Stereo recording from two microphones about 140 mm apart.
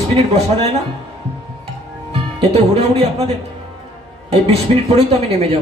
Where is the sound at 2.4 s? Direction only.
45° right (ahead or behind).